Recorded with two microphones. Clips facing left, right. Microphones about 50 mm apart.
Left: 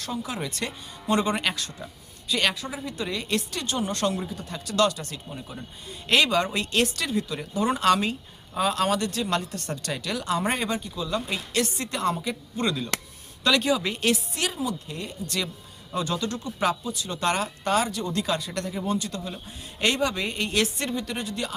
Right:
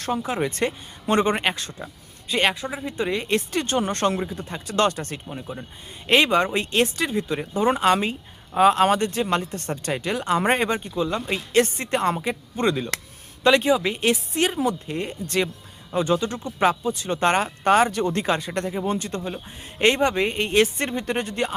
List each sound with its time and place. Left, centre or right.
0.0 s speech: right
5.3 s speech: right